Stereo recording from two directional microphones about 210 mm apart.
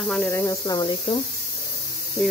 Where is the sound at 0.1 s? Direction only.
10° left (ahead or behind).